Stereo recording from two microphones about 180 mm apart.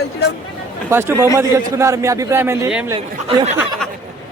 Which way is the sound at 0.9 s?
15° right (ahead or behind).